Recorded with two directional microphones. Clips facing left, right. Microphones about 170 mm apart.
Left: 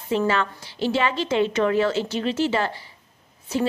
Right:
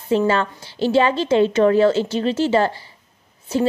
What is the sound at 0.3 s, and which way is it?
A woman's voice, 35° right (ahead or behind).